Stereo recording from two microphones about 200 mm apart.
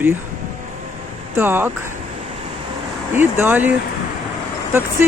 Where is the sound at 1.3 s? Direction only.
10° right (ahead or behind).